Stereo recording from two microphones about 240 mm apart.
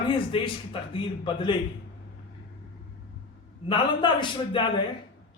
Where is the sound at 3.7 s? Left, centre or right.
Centre.